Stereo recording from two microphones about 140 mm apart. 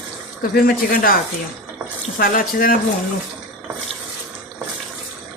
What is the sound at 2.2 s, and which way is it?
Speech, 90° left.